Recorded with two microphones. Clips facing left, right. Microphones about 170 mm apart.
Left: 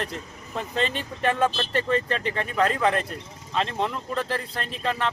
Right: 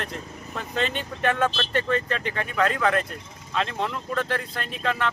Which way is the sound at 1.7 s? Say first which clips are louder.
Left 1 dB; 30° left (ahead or behind).